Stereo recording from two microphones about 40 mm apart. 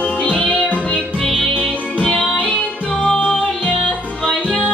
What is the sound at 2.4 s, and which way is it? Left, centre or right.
Music, left.